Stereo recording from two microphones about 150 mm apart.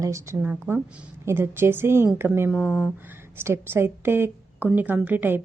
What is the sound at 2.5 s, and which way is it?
Speech, 5° right (ahead or behind).